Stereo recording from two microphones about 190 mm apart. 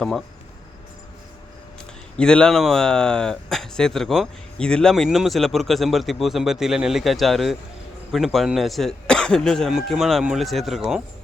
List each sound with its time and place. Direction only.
2.1 s speech: 5° left (ahead or behind)